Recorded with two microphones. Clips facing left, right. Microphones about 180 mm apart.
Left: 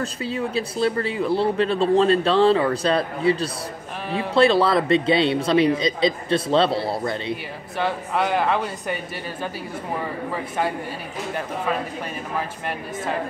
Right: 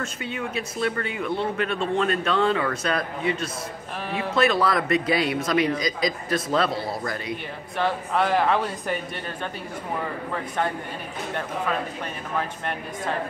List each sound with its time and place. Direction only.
0.0 s speech: 35° left (ahead or behind)
7.7 s speech: centre (ahead or behind)